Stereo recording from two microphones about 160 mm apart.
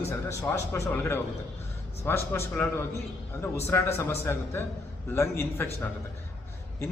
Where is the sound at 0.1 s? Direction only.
20° left (ahead or behind).